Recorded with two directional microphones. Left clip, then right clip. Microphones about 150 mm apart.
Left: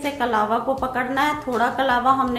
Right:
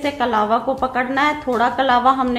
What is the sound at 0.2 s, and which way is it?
A woman's voice, 30° right (ahead or behind).